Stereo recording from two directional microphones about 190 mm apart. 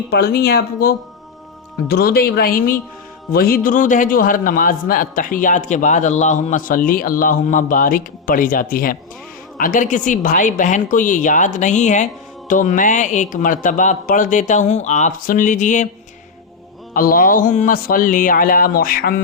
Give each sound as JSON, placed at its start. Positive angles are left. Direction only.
{"t": 0.1, "sound": "a man's voice", "side_deg": 55}
{"t": 16.9, "sound": "a man's voice", "side_deg": 50}